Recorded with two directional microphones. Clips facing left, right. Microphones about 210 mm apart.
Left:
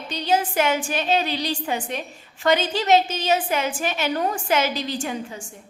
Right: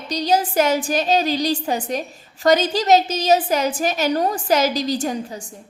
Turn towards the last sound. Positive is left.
turn(degrees=-40)  # may be behind; listen again after turning